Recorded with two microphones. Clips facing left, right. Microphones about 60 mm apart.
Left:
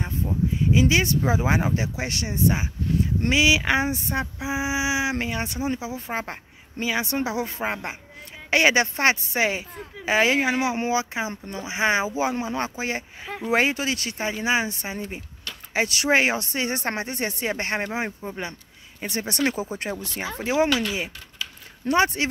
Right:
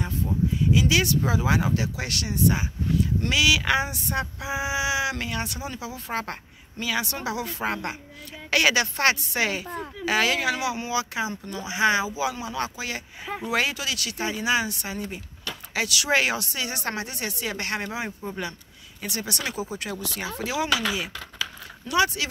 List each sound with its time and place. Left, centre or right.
0.7 s speech: left